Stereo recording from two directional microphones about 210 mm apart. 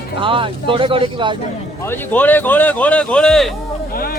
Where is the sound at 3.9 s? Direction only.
45° left (ahead or behind).